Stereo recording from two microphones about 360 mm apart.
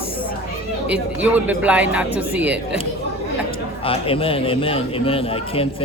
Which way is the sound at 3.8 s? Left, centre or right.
Centre.